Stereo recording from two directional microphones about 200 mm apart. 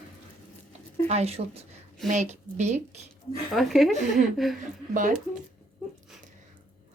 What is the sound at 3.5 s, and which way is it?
Speech, centre (ahead or behind).